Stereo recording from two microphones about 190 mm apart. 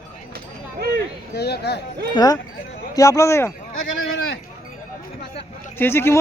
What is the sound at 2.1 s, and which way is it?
Speech, 20° left (ahead or behind).